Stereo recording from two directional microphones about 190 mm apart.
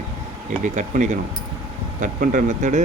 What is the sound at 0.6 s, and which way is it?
Speech, 40° right (ahead or behind).